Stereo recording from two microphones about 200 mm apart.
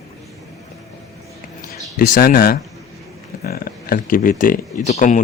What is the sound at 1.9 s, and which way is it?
Speech, 45° left (ahead or behind).